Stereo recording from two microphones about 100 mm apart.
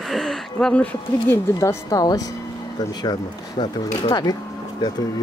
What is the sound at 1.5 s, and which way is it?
Speech, 35° left (ahead or behind).